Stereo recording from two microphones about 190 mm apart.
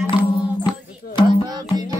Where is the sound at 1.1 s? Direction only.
25° left (ahead or behind).